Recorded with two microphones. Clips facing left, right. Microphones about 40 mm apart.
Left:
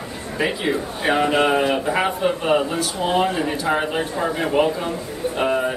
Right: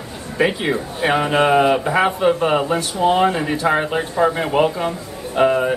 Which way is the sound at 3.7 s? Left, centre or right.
Right.